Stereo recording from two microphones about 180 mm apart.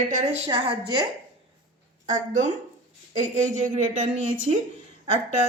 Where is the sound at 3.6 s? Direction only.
40° right (ahead or behind).